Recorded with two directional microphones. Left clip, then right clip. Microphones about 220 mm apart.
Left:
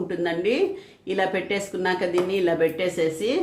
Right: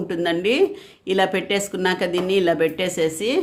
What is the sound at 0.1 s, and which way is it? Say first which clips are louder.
Speech: right 4 dB; 50° right (ahead or behind).